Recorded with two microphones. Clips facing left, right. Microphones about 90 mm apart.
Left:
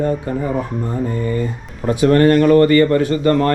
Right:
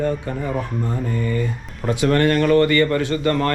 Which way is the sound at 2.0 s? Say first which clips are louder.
Left 6 dB; 35° left (ahead or behind).